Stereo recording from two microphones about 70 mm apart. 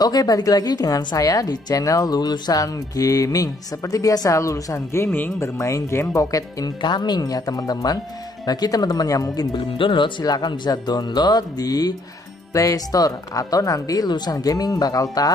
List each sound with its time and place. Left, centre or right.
0.0 s speech: left
5.1 s speech: left
5.6 s speech: left
6.1 s speech: left
6.8 s speech: left
14.0 s speech: left